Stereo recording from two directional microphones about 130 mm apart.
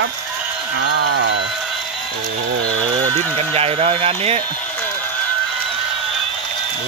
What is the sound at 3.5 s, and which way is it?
Speech, 50° right (ahead or behind).